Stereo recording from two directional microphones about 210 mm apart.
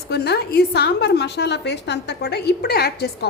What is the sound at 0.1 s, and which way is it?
A woman's voice, 50° left (ahead or behind).